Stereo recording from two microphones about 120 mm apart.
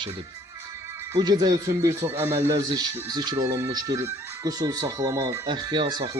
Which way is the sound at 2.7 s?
35° right (ahead or behind).